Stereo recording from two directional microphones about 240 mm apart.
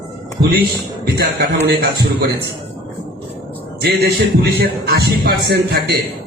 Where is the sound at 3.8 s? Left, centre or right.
Right.